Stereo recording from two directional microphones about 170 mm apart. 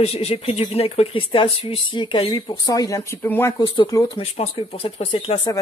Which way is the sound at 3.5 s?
30° left (ahead or behind).